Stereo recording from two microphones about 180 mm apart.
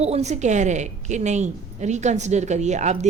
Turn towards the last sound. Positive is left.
turn(degrees=-40)  # may be behind; listen again after turning